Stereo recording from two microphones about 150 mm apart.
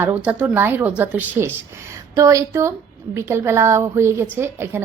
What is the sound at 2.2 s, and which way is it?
A woman's voice, 20° right (ahead or behind).